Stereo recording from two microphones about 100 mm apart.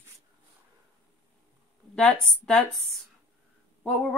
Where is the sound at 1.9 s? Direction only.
5° left (ahead or behind).